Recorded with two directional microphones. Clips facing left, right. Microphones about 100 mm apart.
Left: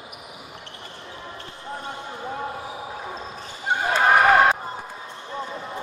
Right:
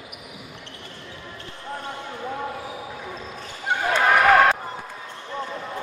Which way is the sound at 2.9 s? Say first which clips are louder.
Left 2 dB; 30° left (ahead or behind).